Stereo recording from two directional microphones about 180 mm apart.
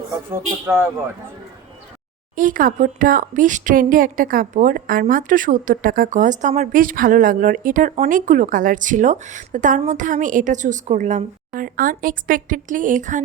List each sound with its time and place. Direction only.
0.3 s speech: 15° right (ahead or behind)
2.3 s speech: 50° right (ahead or behind)